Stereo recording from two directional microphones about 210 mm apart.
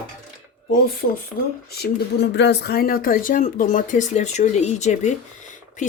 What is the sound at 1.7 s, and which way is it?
Speech, 50° left (ahead or behind).